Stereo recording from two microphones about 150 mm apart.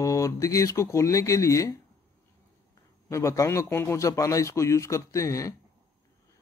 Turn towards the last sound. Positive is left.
turn(degrees=20)  # may be behind; listen again after turning